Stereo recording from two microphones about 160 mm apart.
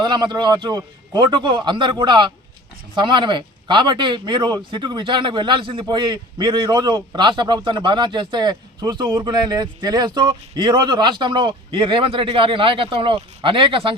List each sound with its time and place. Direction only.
0.0 s speech: 25° right (ahead or behind)